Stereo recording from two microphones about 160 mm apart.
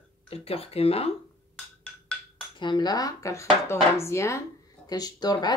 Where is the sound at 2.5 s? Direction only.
30° left (ahead or behind).